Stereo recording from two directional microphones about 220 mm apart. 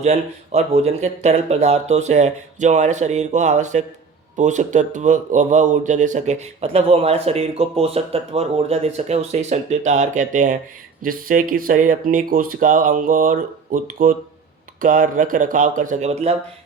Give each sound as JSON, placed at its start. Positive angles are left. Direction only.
{"t": 0.0, "sound": "speech", "side_deg": -30}